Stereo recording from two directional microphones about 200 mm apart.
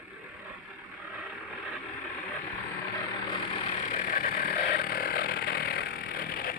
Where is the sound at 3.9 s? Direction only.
40° left (ahead or behind).